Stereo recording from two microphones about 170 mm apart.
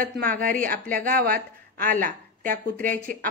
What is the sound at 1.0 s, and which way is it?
A woman's voice, 55° right (ahead or behind).